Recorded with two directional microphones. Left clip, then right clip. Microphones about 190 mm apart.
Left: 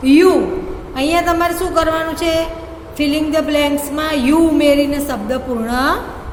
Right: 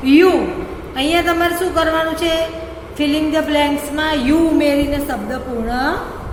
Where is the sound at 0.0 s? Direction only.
70° left (ahead or behind).